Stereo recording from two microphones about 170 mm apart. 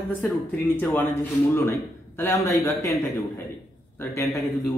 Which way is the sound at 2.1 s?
15° left (ahead or behind).